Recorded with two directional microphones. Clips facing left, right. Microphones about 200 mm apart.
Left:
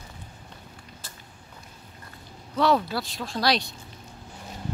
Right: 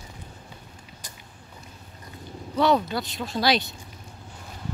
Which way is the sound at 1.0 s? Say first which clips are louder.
Right 1 dB; 15° right (ahead or behind).